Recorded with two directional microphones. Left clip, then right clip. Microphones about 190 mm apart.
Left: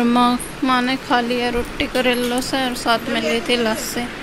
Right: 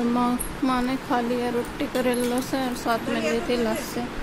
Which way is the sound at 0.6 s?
Centre (ahead or behind).